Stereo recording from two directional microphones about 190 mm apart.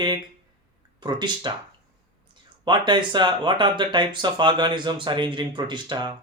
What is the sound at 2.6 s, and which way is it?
Speech, 25° right (ahead or behind).